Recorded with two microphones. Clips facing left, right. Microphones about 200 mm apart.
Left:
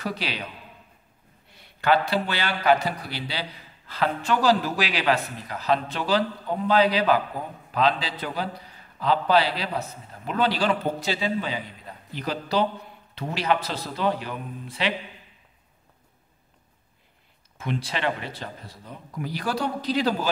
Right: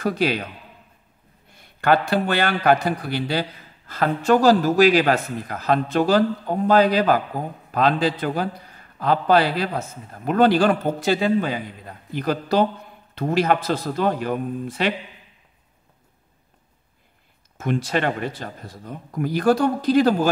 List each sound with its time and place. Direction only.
0.0 s a man's voice: 50° right (ahead or behind)
1.5 s a man's voice: 50° right (ahead or behind)
17.6 s a man's voice: 45° right (ahead or behind)